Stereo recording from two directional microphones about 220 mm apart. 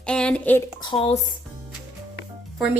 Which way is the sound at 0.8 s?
25° left (ahead or behind).